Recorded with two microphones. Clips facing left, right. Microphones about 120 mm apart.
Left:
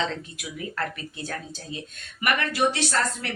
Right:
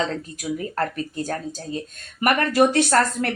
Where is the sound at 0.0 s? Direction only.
40° right (ahead or behind).